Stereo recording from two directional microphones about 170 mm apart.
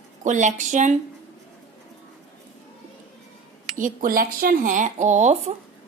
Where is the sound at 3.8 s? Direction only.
50° right (ahead or behind).